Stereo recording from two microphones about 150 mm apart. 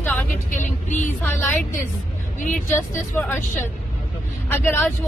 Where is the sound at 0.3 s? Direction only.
60° left (ahead or behind).